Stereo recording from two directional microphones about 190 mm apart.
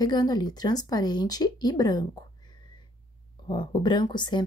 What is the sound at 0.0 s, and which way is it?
Speech, 20° left (ahead or behind).